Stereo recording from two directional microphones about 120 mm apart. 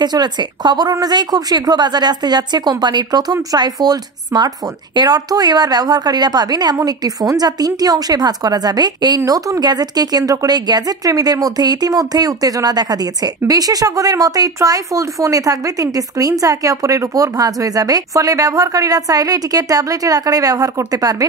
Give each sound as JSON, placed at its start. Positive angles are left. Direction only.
{"t": 0.0, "sound": "a woman's voice", "side_deg": -35}